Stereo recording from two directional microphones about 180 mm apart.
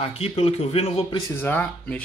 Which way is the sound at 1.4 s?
10° left (ahead or behind).